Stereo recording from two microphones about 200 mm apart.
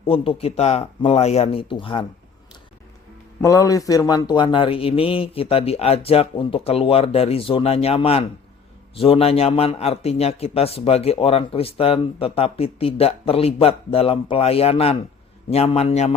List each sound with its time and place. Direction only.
0.0 s a man's voice: 30° left (ahead or behind)
3.4 s a man's voice: 15° left (ahead or behind)